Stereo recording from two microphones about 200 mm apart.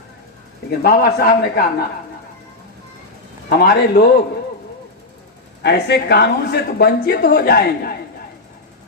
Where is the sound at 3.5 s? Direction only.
50° left (ahead or behind).